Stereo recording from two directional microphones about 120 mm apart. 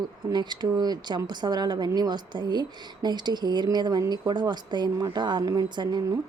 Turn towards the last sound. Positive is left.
turn(degrees=-40)  # may be behind; listen again after turning